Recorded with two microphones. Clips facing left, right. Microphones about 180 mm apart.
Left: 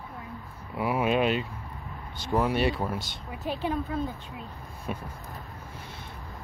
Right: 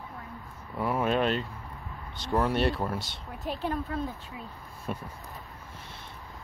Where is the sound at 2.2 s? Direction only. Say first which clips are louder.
Left 1 dB; 5° left (ahead or behind).